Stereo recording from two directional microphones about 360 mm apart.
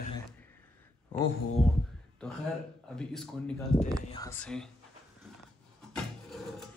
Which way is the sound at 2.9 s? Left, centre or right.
Centre.